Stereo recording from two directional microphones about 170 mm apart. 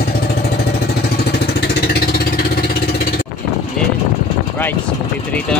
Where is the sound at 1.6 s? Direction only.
65° left (ahead or behind).